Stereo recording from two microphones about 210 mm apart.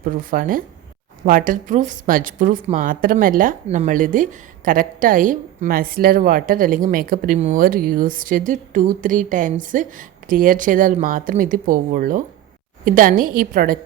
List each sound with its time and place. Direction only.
0.0 s a woman's voice: 40° right (ahead or behind)